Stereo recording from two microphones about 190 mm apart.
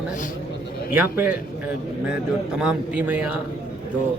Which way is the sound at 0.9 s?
10° right (ahead or behind).